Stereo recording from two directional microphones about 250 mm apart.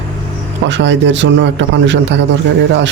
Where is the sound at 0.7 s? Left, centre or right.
Right.